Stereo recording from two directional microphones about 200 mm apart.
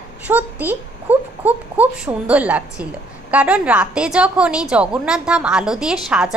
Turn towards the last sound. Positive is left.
turn(degrees=0)  # may be behind; listen again after turning